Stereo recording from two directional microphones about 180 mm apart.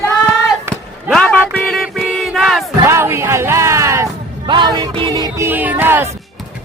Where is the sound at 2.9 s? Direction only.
15° right (ahead or behind).